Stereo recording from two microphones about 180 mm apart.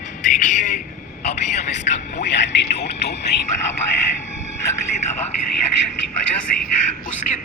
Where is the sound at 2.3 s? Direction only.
75° left (ahead or behind).